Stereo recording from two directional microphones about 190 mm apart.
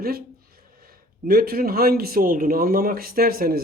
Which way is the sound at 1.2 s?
55° right (ahead or behind).